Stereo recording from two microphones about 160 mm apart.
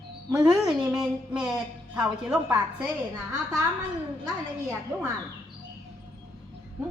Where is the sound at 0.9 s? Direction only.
5° right (ahead or behind).